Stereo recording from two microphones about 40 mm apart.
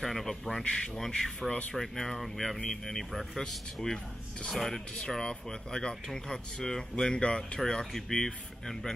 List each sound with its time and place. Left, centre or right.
0.0 s speech: centre